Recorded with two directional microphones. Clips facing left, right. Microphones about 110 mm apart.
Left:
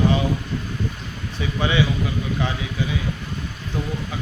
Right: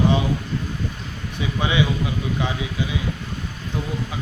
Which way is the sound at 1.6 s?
15° right (ahead or behind).